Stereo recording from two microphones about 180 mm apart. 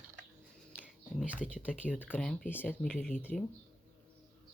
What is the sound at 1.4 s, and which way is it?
Speech, 5° right (ahead or behind).